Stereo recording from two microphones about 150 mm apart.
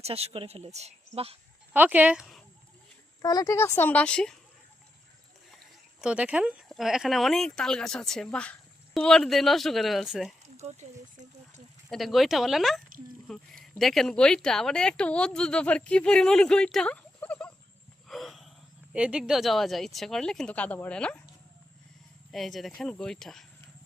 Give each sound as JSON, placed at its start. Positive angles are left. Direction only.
{"t": 0.0, "sound": "a woman's voice", "side_deg": -45}
{"t": 1.7, "sound": "speech", "side_deg": -10}
{"t": 3.2, "sound": "a woman's voice", "side_deg": 25}
{"t": 6.0, "sound": "speech", "side_deg": -10}
{"t": 10.6, "sound": "a woman's voice", "side_deg": -50}
{"t": 11.9, "sound": "speech", "side_deg": 0}
{"t": 18.1, "sound": "a sound", "side_deg": 0}
{"t": 18.9, "sound": "speech", "side_deg": -5}
{"t": 22.3, "sound": "speech", "side_deg": 0}